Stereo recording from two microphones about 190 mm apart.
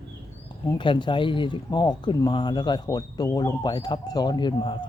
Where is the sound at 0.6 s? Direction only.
25° left (ahead or behind).